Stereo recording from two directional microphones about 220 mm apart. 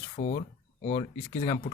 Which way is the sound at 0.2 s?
40° left (ahead or behind).